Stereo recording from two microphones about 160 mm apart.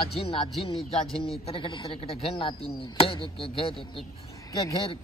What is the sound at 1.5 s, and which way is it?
Speech, 30° left (ahead or behind).